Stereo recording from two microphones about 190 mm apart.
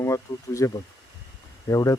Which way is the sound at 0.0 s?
15° left (ahead or behind).